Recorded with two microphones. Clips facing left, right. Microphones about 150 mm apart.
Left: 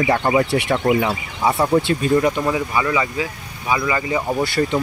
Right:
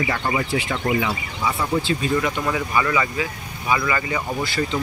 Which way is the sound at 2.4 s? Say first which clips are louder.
Left 2 dB; 15° left (ahead or behind).